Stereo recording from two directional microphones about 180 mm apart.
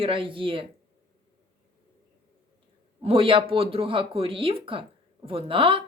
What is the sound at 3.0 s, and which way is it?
Speech, 30° right (ahead or behind).